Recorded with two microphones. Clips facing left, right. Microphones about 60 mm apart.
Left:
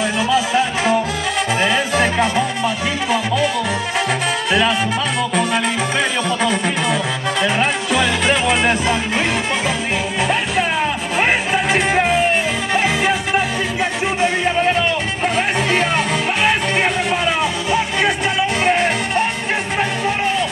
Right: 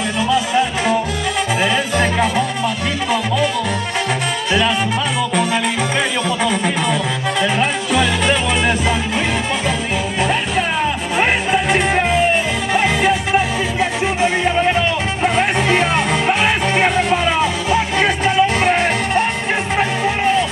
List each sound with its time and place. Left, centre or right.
0.3 s music: centre
4.5 s music: centre
11.1 s music: centre
15.2 s music: centre